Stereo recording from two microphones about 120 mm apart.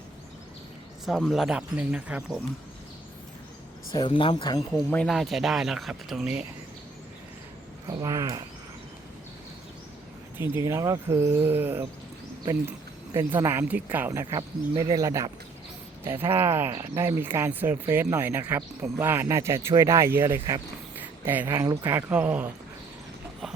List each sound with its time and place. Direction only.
1.0 s speech: centre (ahead or behind)
3.9 s speech: 40° left (ahead or behind)
5.0 s speech: centre (ahead or behind)
7.9 s speech: 30° right (ahead or behind)
10.3 s speech: 20° right (ahead or behind)
13.1 s speech: 20° right (ahead or behind)
21.9 s speech: 10° right (ahead or behind)